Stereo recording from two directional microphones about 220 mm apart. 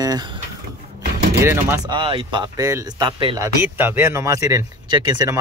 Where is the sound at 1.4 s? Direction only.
10° right (ahead or behind).